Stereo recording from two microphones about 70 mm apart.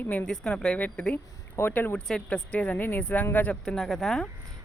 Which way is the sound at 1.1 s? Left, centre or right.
Left.